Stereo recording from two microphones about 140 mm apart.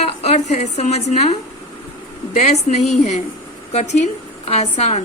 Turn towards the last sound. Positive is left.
turn(degrees=50)  # may be behind; listen again after turning